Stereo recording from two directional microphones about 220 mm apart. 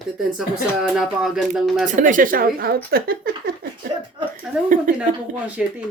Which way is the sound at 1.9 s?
35° right (ahead or behind).